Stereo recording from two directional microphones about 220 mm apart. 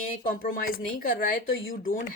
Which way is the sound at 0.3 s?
40° left (ahead or behind).